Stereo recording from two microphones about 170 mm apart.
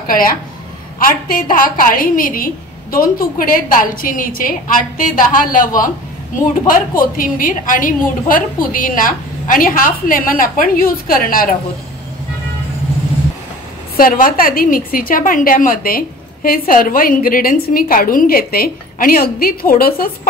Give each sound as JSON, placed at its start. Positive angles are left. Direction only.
{"t": 0.0, "sound": "a woman's voice", "side_deg": 55}
{"t": 7.0, "sound": "a woman's voice", "side_deg": 55}
{"t": 13.9, "sound": "a woman's voice", "side_deg": 55}